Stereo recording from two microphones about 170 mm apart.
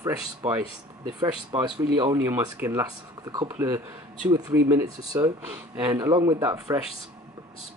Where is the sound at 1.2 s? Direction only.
20° right (ahead or behind).